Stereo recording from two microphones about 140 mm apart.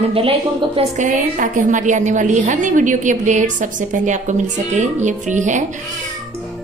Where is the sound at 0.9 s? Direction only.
65° right (ahead or behind).